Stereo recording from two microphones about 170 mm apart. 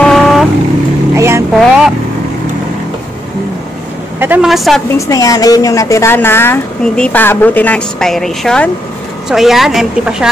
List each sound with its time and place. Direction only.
0.0 s vehicle: centre (ahead or behind)
1.1 s vehicle: 15° right (ahead or behind)
1.5 s vehicle: centre (ahead or behind)
4.2 s a woman's voice: 5° right (ahead or behind)
4.9 s a woman's voice: 20° left (ahead or behind); by 10.3 s 5° right (ahead or behind)